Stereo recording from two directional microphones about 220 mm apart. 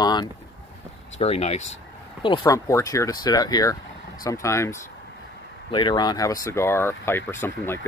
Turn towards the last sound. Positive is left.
turn(degrees=10)  # may be behind; listen again after turning